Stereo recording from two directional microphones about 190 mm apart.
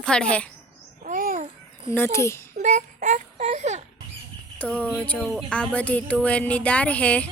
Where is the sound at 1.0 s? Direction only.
45° right (ahead or behind).